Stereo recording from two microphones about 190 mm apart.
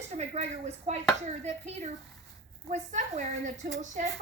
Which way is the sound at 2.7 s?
40° right (ahead or behind).